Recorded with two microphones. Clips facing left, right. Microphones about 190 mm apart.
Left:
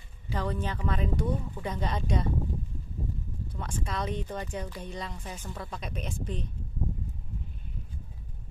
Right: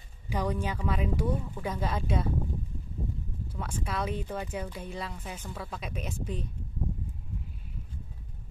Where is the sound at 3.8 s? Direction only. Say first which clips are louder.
Even; 5° right (ahead or behind).